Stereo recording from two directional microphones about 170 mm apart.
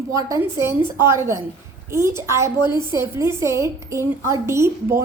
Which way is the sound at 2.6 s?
25° left (ahead or behind).